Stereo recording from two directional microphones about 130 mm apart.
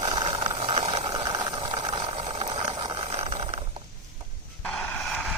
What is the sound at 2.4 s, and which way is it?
Vehicle, 45° right (ahead or behind).